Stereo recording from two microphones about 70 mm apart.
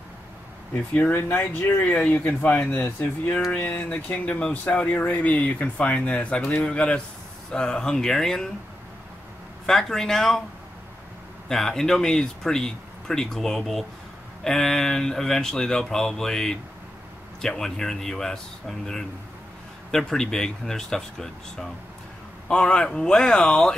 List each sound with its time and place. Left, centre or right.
1.1 s speech: left; by 8.5 s centre
9.7 s speech: centre
11.4 s speech: centre